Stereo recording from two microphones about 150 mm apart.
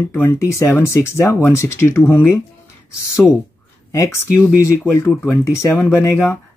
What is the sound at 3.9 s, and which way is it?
Speech, 20° left (ahead or behind).